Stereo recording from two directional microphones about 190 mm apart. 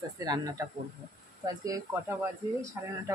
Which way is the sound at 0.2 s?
20° right (ahead or behind).